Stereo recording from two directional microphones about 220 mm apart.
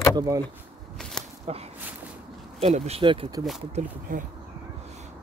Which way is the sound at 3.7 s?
35° right (ahead or behind).